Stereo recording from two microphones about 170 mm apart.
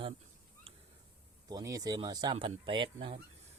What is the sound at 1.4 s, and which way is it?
Speech, 20° right (ahead or behind).